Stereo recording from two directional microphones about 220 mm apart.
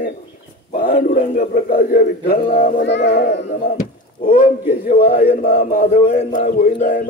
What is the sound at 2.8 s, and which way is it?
Speech, 50° left (ahead or behind).